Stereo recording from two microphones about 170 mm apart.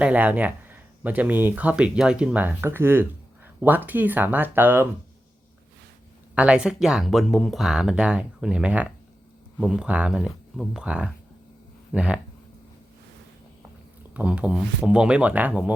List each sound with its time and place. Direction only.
0.0 s speech: 10° right (ahead or behind)
6.3 s speech: 5° right (ahead or behind)
14.1 s speech: 5° right (ahead or behind)